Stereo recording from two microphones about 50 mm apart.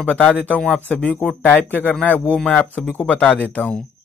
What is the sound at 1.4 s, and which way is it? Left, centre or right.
Speech, left.